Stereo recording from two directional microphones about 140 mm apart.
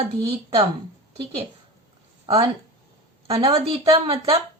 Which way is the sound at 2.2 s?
35° right (ahead or behind).